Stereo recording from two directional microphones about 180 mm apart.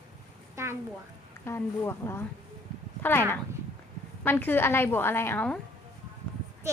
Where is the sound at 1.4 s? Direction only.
15° left (ahead or behind).